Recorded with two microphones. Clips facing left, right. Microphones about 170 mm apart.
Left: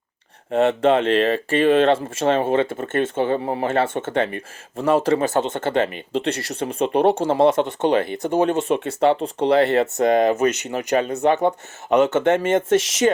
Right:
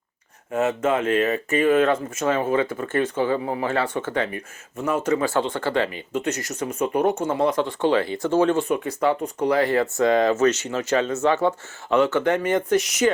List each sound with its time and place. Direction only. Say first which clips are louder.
0.5 s speech: left 5 dB; 30° left (ahead or behind)
3.3 s speech: left 2 dB; 40° left (ahead or behind)
3.7 s speech: left 5 dB; 25° left (ahead or behind)
5.2 s speech: left 2 dB; 20° left (ahead or behind)